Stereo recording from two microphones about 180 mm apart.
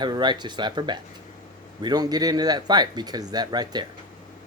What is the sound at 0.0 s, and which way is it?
Speech, 25° right (ahead or behind).